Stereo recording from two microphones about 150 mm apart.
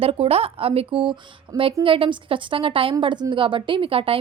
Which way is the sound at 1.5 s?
25° right (ahead or behind).